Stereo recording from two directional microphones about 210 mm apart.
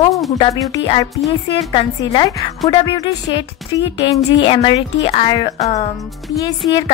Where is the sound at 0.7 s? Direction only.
20° left (ahead or behind).